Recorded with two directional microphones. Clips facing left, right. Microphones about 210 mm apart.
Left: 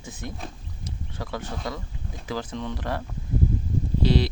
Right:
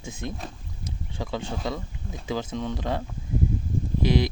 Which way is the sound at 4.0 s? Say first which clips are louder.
Even; 15° right (ahead or behind).